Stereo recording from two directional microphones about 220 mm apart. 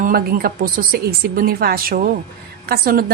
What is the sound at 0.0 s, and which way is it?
Speech, 40° right (ahead or behind).